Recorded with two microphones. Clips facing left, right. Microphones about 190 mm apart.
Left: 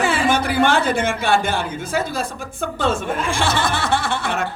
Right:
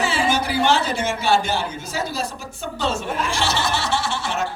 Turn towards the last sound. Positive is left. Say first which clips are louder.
# left 2 dB
turn(degrees=55)  # may be behind; listen again after turning